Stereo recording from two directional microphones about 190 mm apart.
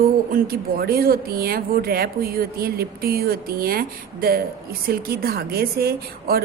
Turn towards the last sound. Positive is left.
turn(degrees=-55)  # may be behind; listen again after turning